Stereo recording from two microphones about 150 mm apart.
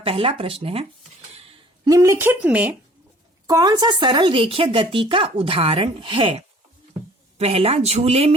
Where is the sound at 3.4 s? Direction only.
25° right (ahead or behind).